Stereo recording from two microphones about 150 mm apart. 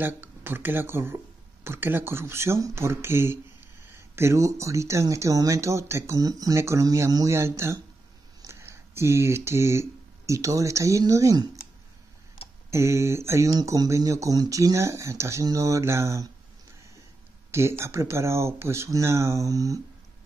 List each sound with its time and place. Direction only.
0.0 s speech: 15° right (ahead or behind)
12.7 s speech: 20° right (ahead or behind)
17.5 s speech: 15° right (ahead or behind)